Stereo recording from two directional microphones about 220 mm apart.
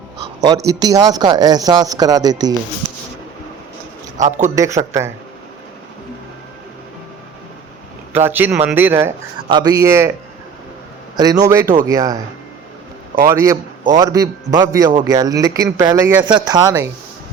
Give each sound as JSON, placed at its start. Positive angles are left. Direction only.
{"t": 0.7, "sound": "speech", "side_deg": -15}
{"t": 4.2, "sound": "a man's voice", "side_deg": -35}
{"t": 4.5, "sound": "speech", "side_deg": -15}
{"t": 8.1, "sound": "speech", "side_deg": -10}
{"t": 11.2, "sound": "speech", "side_deg": -15}
{"t": 13.2, "sound": "speech", "side_deg": -15}